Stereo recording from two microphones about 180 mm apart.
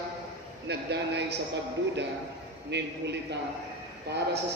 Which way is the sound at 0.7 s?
70° right (ahead or behind).